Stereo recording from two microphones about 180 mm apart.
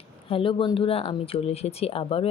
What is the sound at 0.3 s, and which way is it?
Speech, 30° left (ahead or behind).